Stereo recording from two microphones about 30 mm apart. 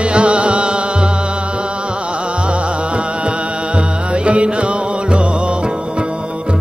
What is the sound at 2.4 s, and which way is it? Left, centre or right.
Music, right.